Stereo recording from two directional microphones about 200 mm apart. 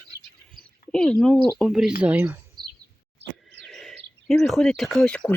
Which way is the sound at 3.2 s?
60° right (ahead or behind).